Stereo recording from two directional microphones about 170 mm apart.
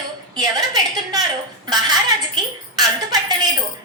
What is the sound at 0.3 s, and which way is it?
Speech, 25° right (ahead or behind).